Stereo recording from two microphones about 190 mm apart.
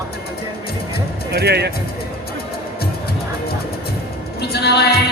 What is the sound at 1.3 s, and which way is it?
Speech, 60° right (ahead or behind).